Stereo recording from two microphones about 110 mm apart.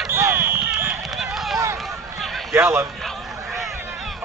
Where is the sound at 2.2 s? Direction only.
Centre (ahead or behind).